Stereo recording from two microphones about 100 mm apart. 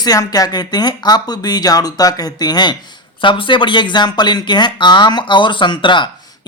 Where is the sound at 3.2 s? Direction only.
55° left (ahead or behind).